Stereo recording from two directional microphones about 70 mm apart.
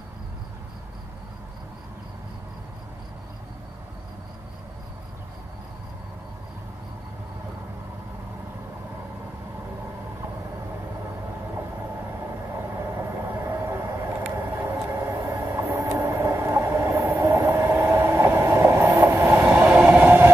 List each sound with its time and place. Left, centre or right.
12.7 s vehicle: right
14.6 s train: right
15.8 s vehicle: right
16.1 s train: right
19.5 s train: centre
20.0 s vehicle: right